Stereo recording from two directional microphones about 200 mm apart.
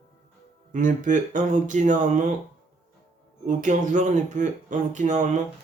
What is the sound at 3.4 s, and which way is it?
Speech, 40° right (ahead or behind).